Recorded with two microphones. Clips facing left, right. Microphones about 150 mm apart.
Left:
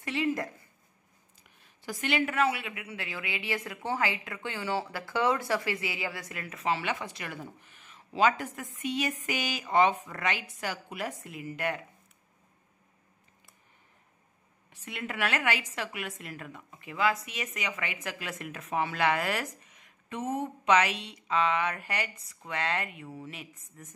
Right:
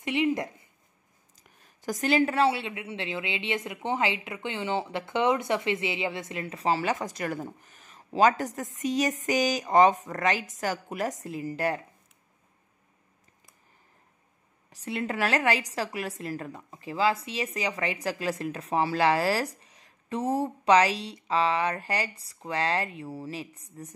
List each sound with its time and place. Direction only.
0.0 s speech: 20° right (ahead or behind)
1.4 s a woman's voice: 40° right (ahead or behind)
14.7 s a woman's voice: 35° right (ahead or behind)